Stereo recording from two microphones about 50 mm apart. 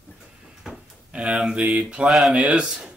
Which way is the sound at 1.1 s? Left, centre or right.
Centre.